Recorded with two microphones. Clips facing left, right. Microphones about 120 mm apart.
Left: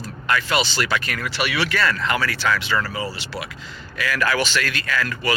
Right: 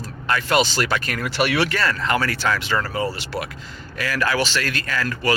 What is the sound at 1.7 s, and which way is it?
Speech, 35° right (ahead or behind).